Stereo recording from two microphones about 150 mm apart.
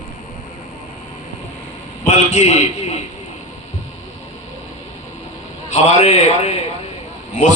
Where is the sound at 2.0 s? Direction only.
50° left (ahead or behind).